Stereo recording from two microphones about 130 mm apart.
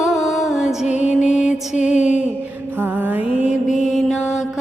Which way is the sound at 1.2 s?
60° left (ahead or behind).